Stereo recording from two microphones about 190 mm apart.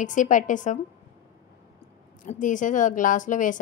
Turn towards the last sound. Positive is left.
turn(degrees=40)  # may be behind; listen again after turning